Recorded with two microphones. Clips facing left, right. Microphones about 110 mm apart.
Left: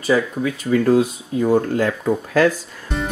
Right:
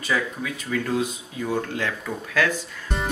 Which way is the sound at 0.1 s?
35° left (ahead or behind).